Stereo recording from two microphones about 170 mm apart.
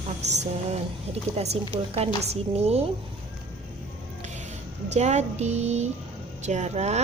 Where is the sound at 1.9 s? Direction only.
35° right (ahead or behind).